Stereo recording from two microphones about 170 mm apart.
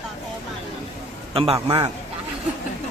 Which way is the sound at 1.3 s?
35° right (ahead or behind).